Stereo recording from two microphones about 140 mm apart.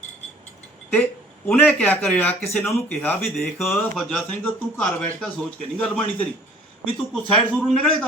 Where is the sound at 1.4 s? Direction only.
10° left (ahead or behind).